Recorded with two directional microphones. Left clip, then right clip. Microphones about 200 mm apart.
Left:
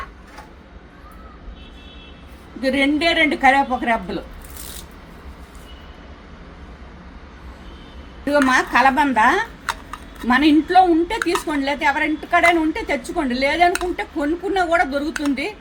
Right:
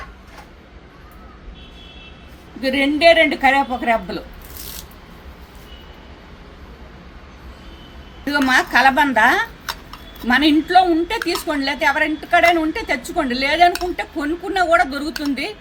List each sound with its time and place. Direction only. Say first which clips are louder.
2.6 s a woman's voice: right 1 dB; centre (ahead or behind)
8.2 s a woman's voice: even; 5° right (ahead or behind)